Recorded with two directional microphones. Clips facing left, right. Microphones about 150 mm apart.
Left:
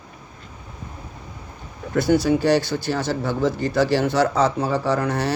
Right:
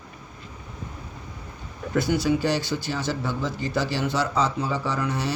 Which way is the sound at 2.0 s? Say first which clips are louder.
Left 6 dB; 65° left (ahead or behind).